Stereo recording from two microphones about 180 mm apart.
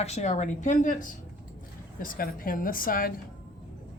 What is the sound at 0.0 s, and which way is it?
A woman's voice, 35° left (ahead or behind).